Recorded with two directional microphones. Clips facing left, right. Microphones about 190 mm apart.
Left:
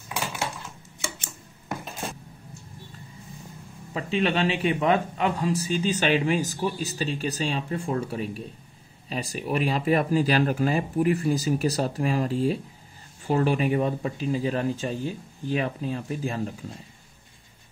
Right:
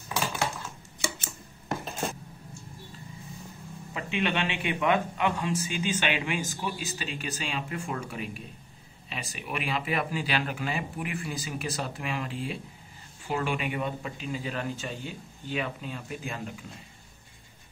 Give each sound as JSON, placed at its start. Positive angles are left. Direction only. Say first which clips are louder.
{"t": 3.9, "sound": "a man's voice", "louder": "left 5 dB", "side_deg": 35}